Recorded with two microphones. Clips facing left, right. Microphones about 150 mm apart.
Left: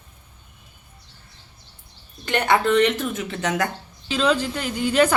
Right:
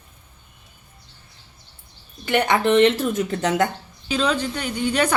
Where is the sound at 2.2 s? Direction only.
15° right (ahead or behind).